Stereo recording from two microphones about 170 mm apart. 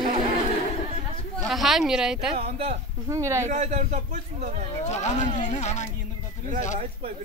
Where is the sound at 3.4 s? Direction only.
45° right (ahead or behind).